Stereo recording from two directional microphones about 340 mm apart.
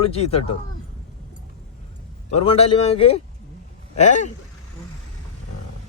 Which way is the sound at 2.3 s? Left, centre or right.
Centre.